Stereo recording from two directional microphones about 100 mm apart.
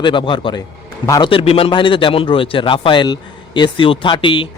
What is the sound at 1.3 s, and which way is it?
A man's voice, 70° left (ahead or behind).